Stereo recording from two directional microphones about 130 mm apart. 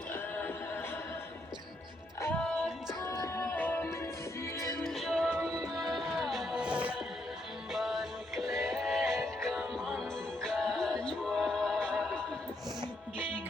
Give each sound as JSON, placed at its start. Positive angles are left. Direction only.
{"t": 0.1, "sound": "a capella", "side_deg": 15}
{"t": 2.4, "sound": "music", "side_deg": 5}
{"t": 3.0, "sound": "music", "side_deg": 20}
{"t": 4.8, "sound": "music", "side_deg": 0}
{"t": 5.4, "sound": "music", "side_deg": -25}
{"t": 5.6, "sound": "music", "side_deg": 0}